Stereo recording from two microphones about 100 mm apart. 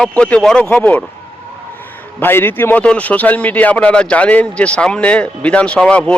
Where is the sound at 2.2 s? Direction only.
20° left (ahead or behind).